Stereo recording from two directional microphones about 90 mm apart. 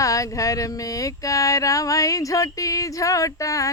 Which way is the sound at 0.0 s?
40° left (ahead or behind).